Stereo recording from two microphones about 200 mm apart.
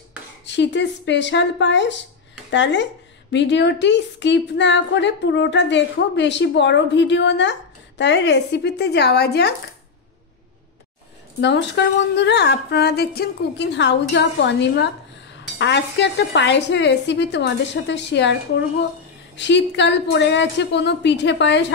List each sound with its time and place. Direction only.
0.5 s a woman's voice: 60° left (ahead or behind)
11.4 s a woman's voice: 60° left (ahead or behind)
19.3 s a woman's voice: 60° left (ahead or behind)